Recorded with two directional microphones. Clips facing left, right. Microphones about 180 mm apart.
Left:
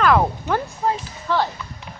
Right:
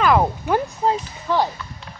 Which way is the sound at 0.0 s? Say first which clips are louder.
Even; 5° right (ahead or behind).